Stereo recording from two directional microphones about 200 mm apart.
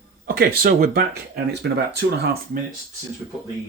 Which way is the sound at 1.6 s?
60° right (ahead or behind).